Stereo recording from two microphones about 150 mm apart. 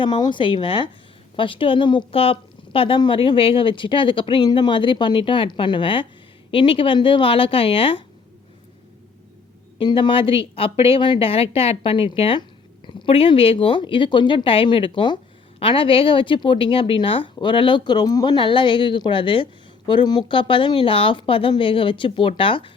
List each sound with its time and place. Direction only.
0.0 s a woman's voice: 30° left (ahead or behind)
9.7 s a woman's voice: 35° left (ahead or behind)